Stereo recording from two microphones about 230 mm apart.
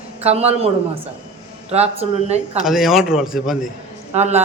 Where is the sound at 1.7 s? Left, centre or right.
Right.